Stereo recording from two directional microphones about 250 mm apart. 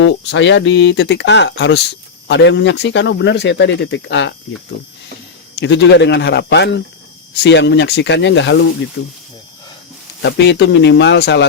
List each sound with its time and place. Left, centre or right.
0.0 s speech: left
5.5 s speech: left
10.2 s speech: left